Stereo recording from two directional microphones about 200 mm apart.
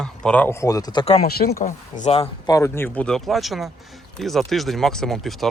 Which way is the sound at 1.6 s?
40° left (ahead or behind).